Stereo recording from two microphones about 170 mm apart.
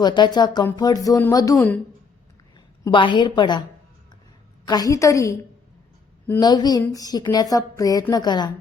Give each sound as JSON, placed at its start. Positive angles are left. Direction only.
{"t": 0.0, "sound": "speech", "side_deg": 25}
{"t": 1.5, "sound": "a woman's voice", "side_deg": 10}
{"t": 2.8, "sound": "speech", "side_deg": 30}
{"t": 4.6, "sound": "speech", "side_deg": 20}
{"t": 6.4, "sound": "speech", "side_deg": 25}